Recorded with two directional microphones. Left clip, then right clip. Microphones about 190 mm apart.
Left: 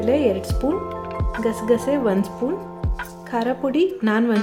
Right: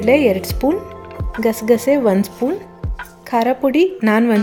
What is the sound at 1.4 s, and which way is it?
Speech, centre (ahead or behind).